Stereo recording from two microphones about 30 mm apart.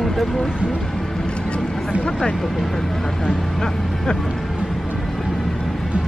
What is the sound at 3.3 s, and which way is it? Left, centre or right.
Vehicle, centre.